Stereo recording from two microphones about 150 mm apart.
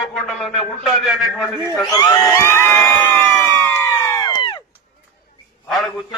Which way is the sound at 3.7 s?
20° left (ahead or behind).